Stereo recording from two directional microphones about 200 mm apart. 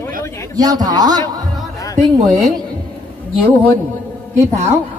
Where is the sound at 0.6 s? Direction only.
20° right (ahead or behind).